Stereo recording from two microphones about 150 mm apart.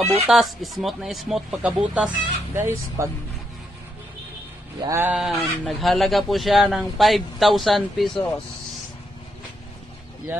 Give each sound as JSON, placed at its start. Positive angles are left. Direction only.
{"t": 0.0, "sound": "speech", "side_deg": -45}
{"t": 0.3, "sound": "speech", "side_deg": 0}
{"t": 2.5, "sound": "speech", "side_deg": -15}
{"t": 4.8, "sound": "speech", "side_deg": -15}
{"t": 5.3, "sound": "speech", "side_deg": 5}